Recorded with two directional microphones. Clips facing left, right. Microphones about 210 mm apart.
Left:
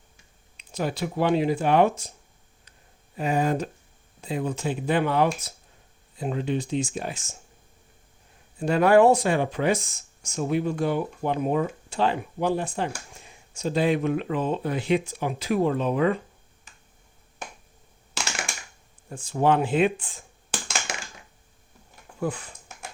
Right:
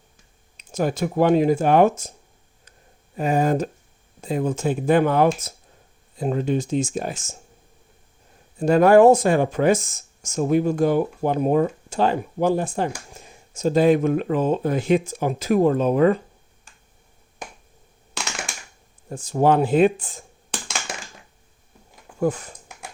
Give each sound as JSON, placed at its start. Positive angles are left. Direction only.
{"t": 0.5, "sound": "speech", "side_deg": -45}
{"t": 3.2, "sound": "speech", "side_deg": -45}
{"t": 8.5, "sound": "speech", "side_deg": -45}
{"t": 18.1, "sound": "crushing", "side_deg": 0}
{"t": 19.0, "sound": "speech", "side_deg": -40}
{"t": 20.5, "sound": "computer keyboard", "side_deg": 0}
{"t": 22.2, "sound": "speech", "side_deg": -45}